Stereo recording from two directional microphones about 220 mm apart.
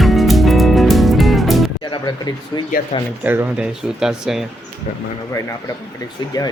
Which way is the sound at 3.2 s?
10° right (ahead or behind).